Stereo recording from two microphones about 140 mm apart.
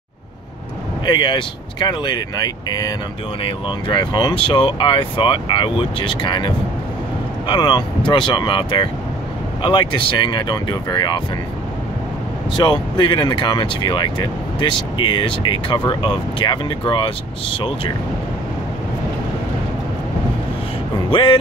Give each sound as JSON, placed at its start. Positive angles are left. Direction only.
{"t": 1.0, "sound": "speech", "side_deg": 35}
{"t": 12.5, "sound": "speech", "side_deg": 35}
{"t": 21.1, "sound": "speech", "side_deg": 35}